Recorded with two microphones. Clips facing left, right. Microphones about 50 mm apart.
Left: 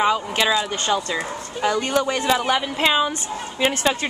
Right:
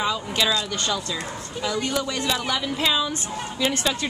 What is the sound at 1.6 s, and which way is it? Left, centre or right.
A woman's voice, left.